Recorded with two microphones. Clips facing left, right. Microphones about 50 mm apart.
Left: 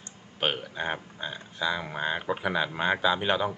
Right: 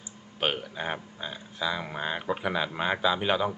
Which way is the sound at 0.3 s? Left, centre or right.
Centre.